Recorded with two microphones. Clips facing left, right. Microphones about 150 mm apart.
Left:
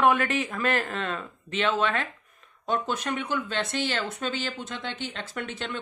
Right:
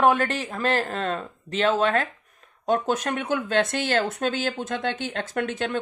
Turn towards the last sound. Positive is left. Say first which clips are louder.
# right 7 dB
turn(degrees=-50)  # may be behind; listen again after turning